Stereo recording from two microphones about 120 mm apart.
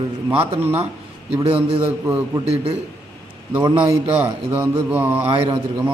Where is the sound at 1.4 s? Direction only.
50° right (ahead or behind).